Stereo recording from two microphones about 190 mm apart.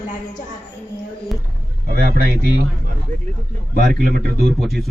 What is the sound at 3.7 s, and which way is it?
Speech, 50° right (ahead or behind).